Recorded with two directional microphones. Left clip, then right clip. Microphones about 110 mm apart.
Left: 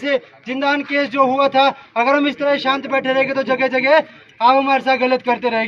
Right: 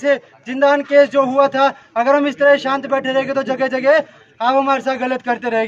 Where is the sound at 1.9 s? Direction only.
60° right (ahead or behind).